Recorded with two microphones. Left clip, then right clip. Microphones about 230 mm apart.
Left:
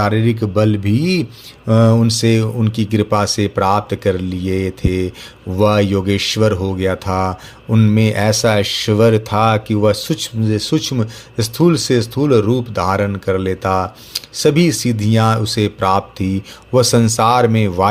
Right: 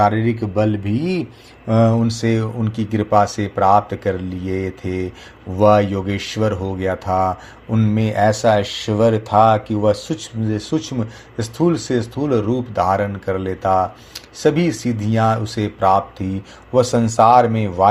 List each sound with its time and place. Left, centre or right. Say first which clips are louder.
0.0 s speech: even; left
9.3 s speech: right 2 dB; left
9.6 s speech: left 2 dB; left
17.2 s speech: right 4 dB; left
17.6 s speech: left 2 dB; left